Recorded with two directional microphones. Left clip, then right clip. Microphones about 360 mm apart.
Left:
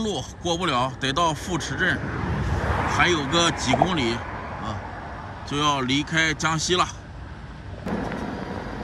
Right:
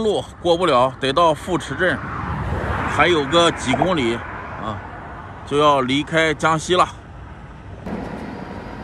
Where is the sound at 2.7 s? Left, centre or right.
Left.